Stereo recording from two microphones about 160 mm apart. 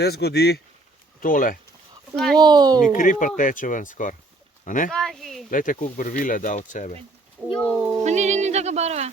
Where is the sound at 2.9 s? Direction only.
55° left (ahead or behind).